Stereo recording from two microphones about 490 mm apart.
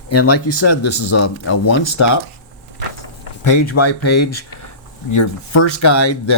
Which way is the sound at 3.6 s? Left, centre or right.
Left.